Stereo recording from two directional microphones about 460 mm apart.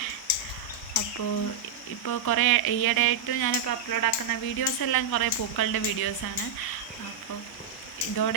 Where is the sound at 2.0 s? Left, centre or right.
Left.